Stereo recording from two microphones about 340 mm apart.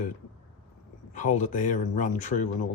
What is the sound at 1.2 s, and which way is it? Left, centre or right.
Speech, left.